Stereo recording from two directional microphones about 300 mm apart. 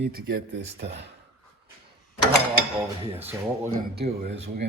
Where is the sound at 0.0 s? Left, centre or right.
Right.